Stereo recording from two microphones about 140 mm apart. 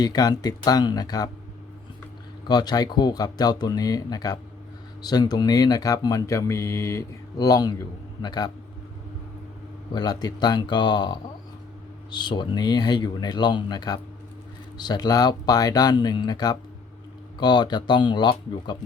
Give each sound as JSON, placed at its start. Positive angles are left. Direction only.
{"t": 0.0, "sound": "speech", "side_deg": 30}
{"t": 2.5, "sound": "speech", "side_deg": 30}
{"t": 9.9, "sound": "speech", "side_deg": 30}